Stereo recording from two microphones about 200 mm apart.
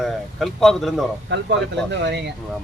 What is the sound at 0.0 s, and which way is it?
Speech, centre (ahead or behind).